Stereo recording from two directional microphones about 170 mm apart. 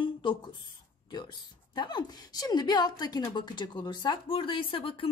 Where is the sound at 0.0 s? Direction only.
30° left (ahead or behind).